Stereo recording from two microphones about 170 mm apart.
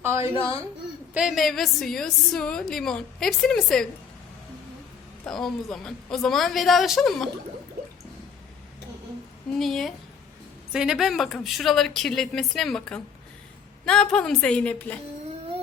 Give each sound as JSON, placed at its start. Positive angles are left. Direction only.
{"t": 0.0, "sound": "speech", "side_deg": -15}
{"t": 1.1, "sound": "a woman's voice", "side_deg": 0}
{"t": 5.2, "sound": "a woman's voice", "side_deg": 0}
{"t": 9.6, "sound": "a woman's voice", "side_deg": 0}